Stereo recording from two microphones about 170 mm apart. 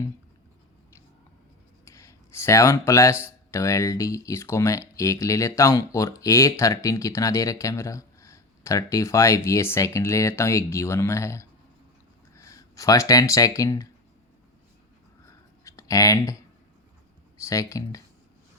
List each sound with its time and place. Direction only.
1.8 s a sound: 15° left (ahead or behind)
3.5 s speech: 20° left (ahead or behind)
15.3 s writing: 20° left (ahead or behind)
17.4 s speech: 20° left (ahead or behind)